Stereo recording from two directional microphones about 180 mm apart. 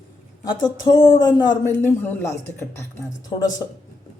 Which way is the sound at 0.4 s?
20° left (ahead or behind).